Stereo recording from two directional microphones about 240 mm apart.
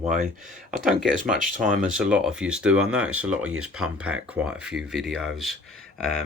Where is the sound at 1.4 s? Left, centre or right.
Right.